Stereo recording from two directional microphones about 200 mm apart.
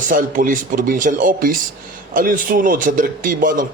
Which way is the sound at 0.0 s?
40° right (ahead or behind).